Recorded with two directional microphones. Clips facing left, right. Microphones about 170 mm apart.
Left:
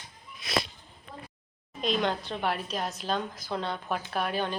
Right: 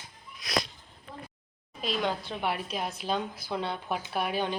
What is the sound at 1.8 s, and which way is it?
A woman's voice, 5° right (ahead or behind).